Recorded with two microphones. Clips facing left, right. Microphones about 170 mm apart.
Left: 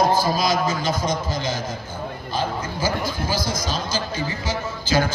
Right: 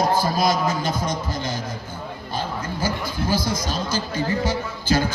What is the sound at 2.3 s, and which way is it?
Dog, 60° right (ahead or behind).